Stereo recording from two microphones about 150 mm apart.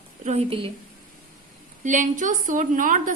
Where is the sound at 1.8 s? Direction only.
55° right (ahead or behind).